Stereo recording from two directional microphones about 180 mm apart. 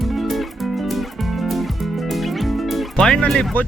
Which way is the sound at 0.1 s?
Centre (ahead or behind).